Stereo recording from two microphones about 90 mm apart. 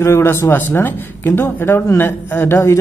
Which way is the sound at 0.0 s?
25° left (ahead or behind).